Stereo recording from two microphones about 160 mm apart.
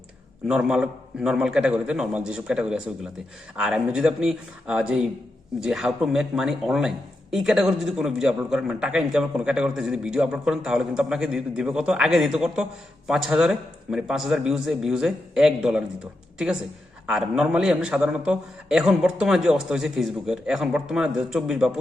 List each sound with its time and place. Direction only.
0.4 s a man's voice: 5° right (ahead or behind)
17.1 s a man's voice: 5° right (ahead or behind)